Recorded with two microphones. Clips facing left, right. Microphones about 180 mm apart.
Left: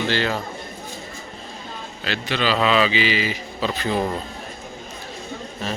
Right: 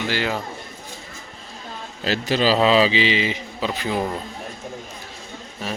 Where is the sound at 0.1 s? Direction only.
15° right (ahead or behind).